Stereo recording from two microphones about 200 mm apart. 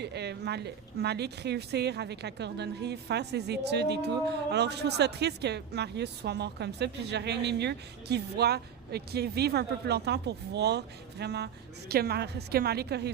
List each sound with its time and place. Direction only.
0.0 s a woman's voice: 55° right (ahead or behind)